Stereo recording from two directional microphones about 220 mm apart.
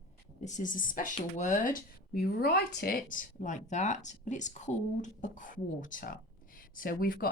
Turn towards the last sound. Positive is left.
turn(degrees=40)  # may be behind; listen again after turning